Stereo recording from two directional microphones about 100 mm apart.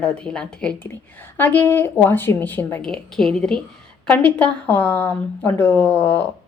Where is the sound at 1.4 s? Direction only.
20° left (ahead or behind).